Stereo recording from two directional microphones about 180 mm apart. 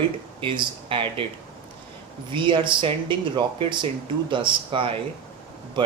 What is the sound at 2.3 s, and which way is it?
Speech, 25° right (ahead or behind).